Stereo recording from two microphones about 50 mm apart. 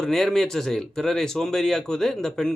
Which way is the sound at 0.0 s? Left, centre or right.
Centre.